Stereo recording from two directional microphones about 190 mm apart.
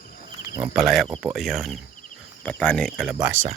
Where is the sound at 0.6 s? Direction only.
Centre (ahead or behind).